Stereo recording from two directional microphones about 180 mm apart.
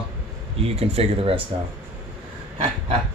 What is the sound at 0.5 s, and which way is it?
Speech, 35° right (ahead or behind).